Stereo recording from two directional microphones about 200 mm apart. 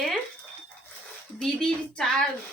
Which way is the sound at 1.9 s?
5° left (ahead or behind).